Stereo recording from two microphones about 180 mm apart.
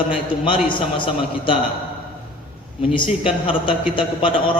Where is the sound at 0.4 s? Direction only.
30° left (ahead or behind).